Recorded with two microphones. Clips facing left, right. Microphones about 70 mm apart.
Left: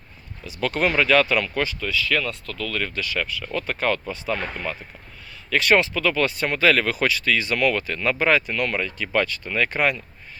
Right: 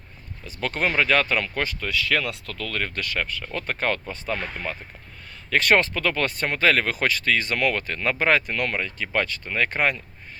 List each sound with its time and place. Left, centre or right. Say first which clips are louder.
0.6 s speech: left 2 dB; right
1.9 s speech: left 1 dB; right
3.2 s speech: left 3 dB; right
5.5 s speech: left 1 dB; right
8.7 s speech: left 2 dB; right